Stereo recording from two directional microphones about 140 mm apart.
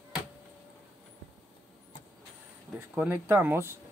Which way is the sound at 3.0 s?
15° right (ahead or behind).